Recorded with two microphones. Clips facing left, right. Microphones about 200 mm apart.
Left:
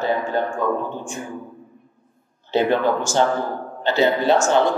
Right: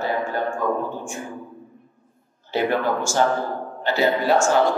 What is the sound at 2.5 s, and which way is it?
A man's voice, 25° left (ahead or behind).